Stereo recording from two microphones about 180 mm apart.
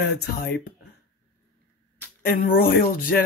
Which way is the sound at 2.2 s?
55° left (ahead or behind).